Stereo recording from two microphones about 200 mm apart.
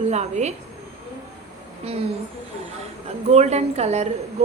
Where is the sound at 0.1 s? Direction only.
35° right (ahead or behind).